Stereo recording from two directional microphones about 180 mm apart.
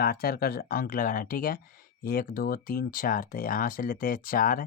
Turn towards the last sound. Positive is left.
turn(degrees=50)  # may be behind; listen again after turning